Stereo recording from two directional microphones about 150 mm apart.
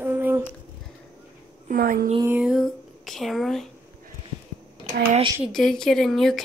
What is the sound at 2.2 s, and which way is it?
Speech, 5° right (ahead or behind).